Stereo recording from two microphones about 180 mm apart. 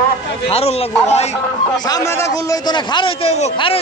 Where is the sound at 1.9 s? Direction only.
20° left (ahead or behind); by 3.8 s 35° left (ahead or behind).